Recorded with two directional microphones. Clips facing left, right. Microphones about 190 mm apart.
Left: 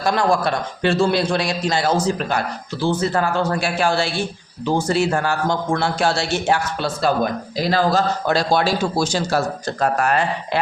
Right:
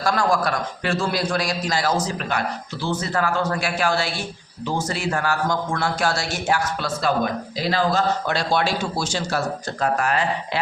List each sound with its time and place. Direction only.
0.0 s a man's voice: 20° left (ahead or behind)
7.6 s a man's voice: 40° left (ahead or behind)